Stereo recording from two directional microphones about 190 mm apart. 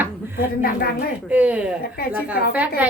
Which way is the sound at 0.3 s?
50° left (ahead or behind).